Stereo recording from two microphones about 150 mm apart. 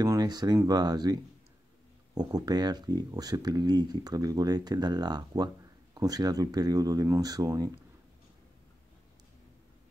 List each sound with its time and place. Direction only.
0.0 s speech: 25° right (ahead or behind)
2.1 s speech: 25° right (ahead or behind)